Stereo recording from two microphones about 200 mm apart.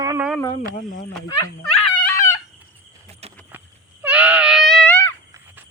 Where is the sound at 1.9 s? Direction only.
15° left (ahead or behind).